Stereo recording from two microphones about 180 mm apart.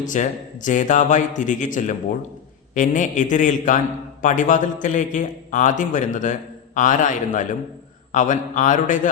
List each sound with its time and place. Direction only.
0.0 s a man's voice: 45° left (ahead or behind)